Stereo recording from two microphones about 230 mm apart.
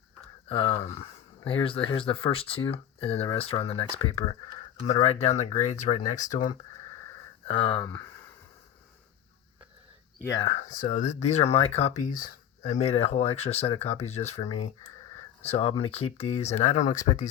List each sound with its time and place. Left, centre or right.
0.4 s speech: left
7.4 s speech: left
7.8 s speech: centre
10.4 s speech: left
15.5 s speech: left